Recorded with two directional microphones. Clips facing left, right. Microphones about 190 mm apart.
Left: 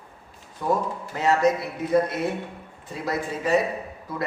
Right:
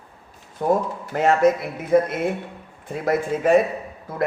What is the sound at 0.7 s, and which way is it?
Speech, 55° right (ahead or behind).